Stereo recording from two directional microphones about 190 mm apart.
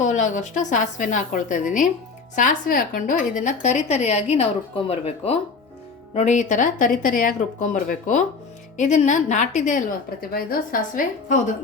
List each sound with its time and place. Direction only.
0.0 s a woman's voice: 40° left (ahead or behind)
10.2 s speech: 50° left (ahead or behind)